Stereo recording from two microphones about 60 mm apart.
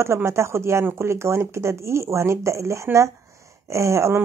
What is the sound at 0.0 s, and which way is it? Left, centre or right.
Speech, right.